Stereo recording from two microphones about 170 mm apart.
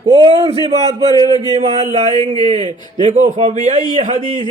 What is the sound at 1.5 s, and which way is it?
A man's voice, 40° right (ahead or behind).